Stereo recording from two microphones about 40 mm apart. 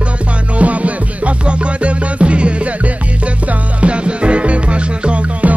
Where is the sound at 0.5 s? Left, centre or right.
Right.